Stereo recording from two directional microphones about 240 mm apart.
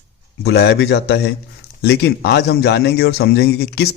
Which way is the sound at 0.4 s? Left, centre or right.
Left.